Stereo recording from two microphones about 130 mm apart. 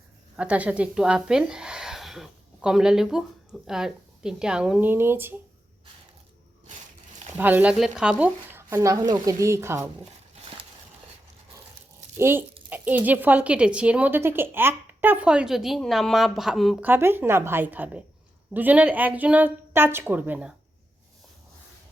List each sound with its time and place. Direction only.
0.3 s speech: 10° right (ahead or behind)
7.3 s speech: 15° right (ahead or behind)
12.1 s speech: 15° right (ahead or behind); by 16.7 s centre (ahead or behind)
16.8 s speech: 15° right (ahead or behind)